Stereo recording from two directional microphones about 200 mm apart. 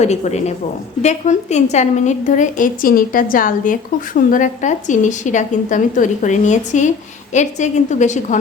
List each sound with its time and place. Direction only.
0.0 s a woman's voice: 35° left (ahead or behind)